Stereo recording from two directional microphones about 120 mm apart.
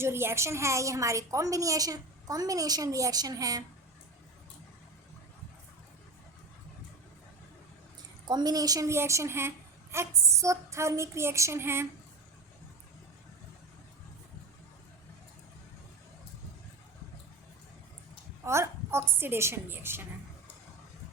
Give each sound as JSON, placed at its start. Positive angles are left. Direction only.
{"t": 0.0, "sound": "a woman's voice", "side_deg": -20}
{"t": 8.3, "sound": "a woman's voice", "side_deg": -35}
{"t": 18.4, "sound": "a woman's voice", "side_deg": -25}